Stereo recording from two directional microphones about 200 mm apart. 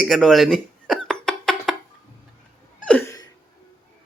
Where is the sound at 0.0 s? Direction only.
Centre (ahead or behind).